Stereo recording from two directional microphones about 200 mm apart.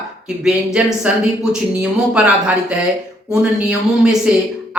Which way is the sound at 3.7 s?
5° right (ahead or behind).